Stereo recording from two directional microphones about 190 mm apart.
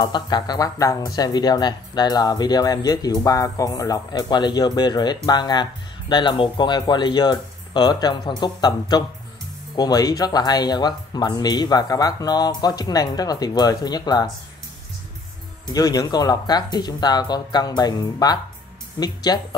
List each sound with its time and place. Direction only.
0.0 s speech: 20° left (ahead or behind)
15.7 s speech: 20° left (ahead or behind)